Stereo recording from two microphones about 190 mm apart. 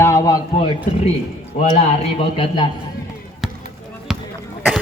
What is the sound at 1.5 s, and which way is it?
Speech, 40° left (ahead or behind).